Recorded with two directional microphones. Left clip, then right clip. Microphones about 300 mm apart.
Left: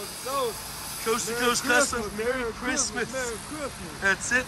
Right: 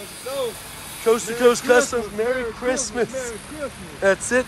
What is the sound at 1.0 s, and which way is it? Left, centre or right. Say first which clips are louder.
Speech: right 9 dB; centre.